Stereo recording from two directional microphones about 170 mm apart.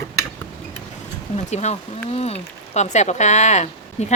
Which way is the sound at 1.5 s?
40° left (ahead or behind).